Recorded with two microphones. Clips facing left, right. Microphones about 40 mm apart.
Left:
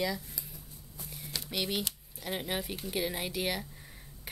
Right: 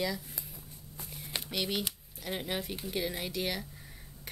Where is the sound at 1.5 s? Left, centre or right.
Centre.